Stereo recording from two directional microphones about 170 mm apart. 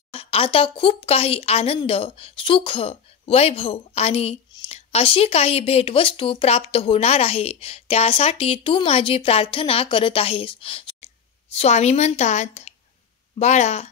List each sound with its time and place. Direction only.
0.1 s speech: 35° left (ahead or behind)